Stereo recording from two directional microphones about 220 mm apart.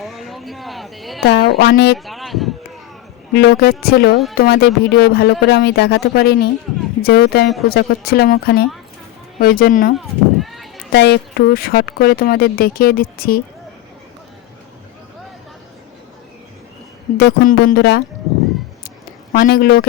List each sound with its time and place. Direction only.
0.0 s speech: centre (ahead or behind)
1.2 s speech: 45° left (ahead or behind)
2.0 s a sound: centre (ahead or behind)
3.3 s speech: 45° left (ahead or behind)
9.9 s a sound: centre (ahead or behind)
10.9 s speech: 45° left (ahead or behind)
17.2 s speech: 45° left (ahead or behind)
19.3 s speech: 40° left (ahead or behind)